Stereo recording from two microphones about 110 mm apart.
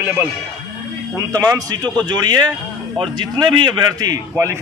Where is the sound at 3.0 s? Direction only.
50° right (ahead or behind).